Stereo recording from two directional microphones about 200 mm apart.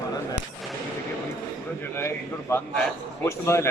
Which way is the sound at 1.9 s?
10° left (ahead or behind).